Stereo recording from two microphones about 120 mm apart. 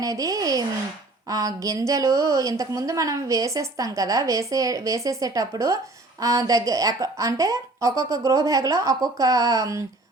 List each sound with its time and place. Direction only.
0.0 s a woman's voice: 30° right (ahead or behind)